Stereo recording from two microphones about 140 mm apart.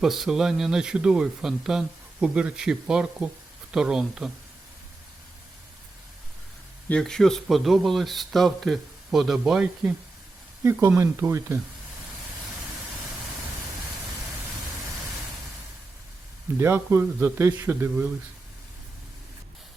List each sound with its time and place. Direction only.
0.0 s speech: centre (ahead or behind)
6.8 s speech: 5° left (ahead or behind)
10.6 s a man's voice: 20° right (ahead or behind)
16.6 s a man's voice: 15° right (ahead or behind)